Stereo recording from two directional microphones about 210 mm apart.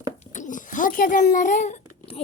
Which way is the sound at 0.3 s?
35° left (ahead or behind).